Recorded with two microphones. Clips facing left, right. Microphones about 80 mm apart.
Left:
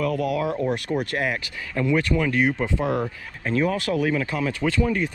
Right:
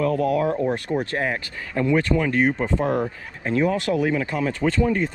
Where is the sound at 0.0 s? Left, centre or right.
Right.